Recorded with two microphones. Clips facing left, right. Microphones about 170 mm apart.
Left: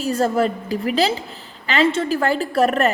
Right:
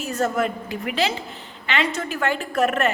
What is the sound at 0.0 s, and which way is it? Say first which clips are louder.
A woman's voice: left 4 dB; 35° left (ahead or behind).